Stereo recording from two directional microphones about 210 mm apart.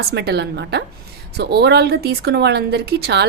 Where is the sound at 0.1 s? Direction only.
50° right (ahead or behind).